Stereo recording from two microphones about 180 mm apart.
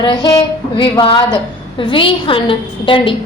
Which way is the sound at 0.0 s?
25° left (ahead or behind).